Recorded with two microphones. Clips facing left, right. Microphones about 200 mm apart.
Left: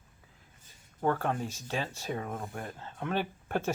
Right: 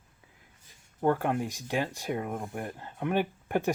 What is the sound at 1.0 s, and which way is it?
Speech, 15° right (ahead or behind).